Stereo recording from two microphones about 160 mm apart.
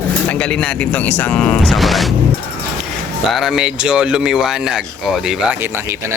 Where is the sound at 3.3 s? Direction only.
Centre (ahead or behind).